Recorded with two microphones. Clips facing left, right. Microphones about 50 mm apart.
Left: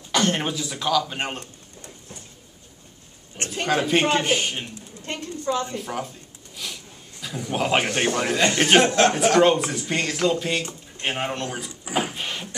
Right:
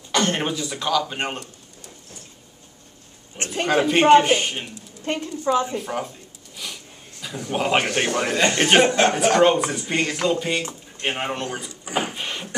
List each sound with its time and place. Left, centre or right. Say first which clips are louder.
0.1 s speech: right 1 dB; centre
3.3 s a man's voice: right 3 dB; centre
3.6 s a man's voice: right 4 dB; centre
5.0 s a woman's voice: right 4 dB; right
5.8 s a man's voice: right 2 dB; centre
6.5 s a sound: even; centre
8.2 s speech: right 2 dB; centre
11.8 s a sound: even; centre